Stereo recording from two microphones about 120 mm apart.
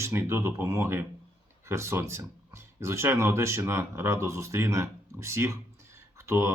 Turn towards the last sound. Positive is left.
turn(degrees=-25)  # may be behind; listen again after turning